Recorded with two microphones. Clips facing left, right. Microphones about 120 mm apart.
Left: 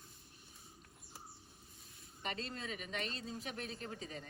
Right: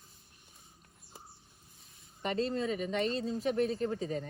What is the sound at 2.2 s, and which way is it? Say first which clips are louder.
Speech: right 12 dB; 35° right (ahead or behind).